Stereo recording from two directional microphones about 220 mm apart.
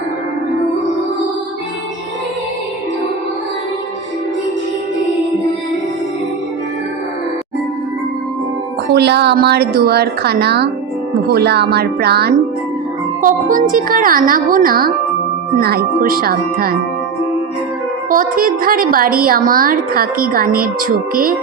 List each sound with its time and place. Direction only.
8.9 s a woman's voice: 50° right (ahead or behind)
18.1 s a woman's voice: 40° right (ahead or behind)